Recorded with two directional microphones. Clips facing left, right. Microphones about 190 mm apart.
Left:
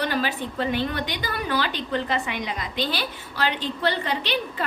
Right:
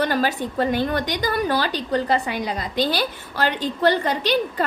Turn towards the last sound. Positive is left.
turn(degrees=-45)  # may be behind; listen again after turning